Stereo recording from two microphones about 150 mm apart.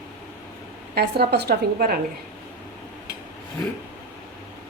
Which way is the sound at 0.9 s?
90° right.